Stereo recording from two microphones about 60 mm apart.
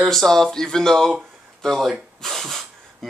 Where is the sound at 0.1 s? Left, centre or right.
Centre.